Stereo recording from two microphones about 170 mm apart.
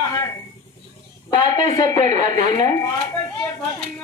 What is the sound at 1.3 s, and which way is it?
Speech, 25° left (ahead or behind).